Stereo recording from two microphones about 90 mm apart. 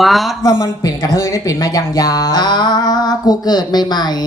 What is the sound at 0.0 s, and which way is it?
Speech, centre (ahead or behind).